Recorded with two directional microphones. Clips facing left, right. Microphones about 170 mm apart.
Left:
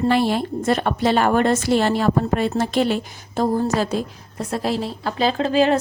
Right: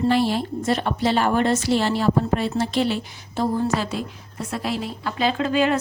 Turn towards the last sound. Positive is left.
turn(degrees=30)  # may be behind; listen again after turning